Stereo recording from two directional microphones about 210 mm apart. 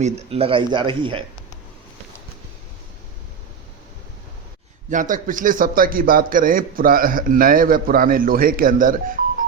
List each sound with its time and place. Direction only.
0.0 s speech: 30° right (ahead or behind)
4.9 s a man's voice: 40° right (ahead or behind)